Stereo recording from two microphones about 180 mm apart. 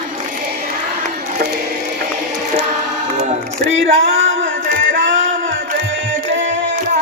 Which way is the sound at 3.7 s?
90° right.